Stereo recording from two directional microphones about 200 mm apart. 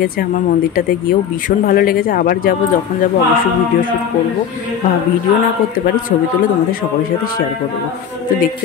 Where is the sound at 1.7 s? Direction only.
45° left (ahead or behind).